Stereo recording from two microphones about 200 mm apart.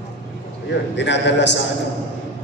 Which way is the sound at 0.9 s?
60° left (ahead or behind).